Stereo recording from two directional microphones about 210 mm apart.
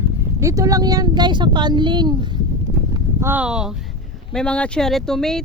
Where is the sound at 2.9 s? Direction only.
10° right (ahead or behind).